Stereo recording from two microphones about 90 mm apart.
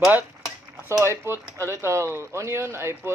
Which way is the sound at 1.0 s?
30° right (ahead or behind).